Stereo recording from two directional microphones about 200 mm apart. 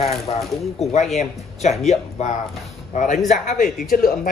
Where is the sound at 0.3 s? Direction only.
25° left (ahead or behind).